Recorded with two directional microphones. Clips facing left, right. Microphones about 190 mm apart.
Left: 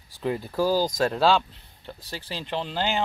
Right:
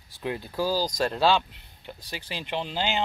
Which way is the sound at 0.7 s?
20° left (ahead or behind).